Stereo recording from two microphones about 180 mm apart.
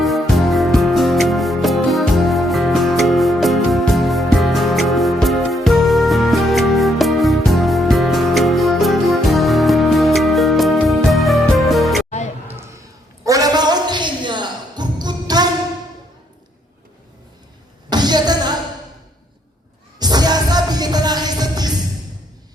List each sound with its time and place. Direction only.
0.0 s music: centre (ahead or behind)
13.2 s music: 20° right (ahead or behind)
17.9 s a sound: 25° right (ahead or behind)
20.0 s music: 20° right (ahead or behind)